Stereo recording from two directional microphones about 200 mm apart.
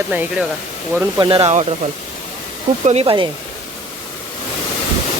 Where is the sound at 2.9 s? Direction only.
30° right (ahead or behind).